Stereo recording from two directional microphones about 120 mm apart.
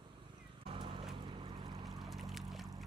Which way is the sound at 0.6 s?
45° right (ahead or behind).